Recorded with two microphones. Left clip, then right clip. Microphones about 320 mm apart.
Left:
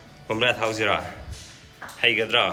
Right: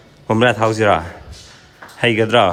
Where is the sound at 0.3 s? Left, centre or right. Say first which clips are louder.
Right 8 dB; right.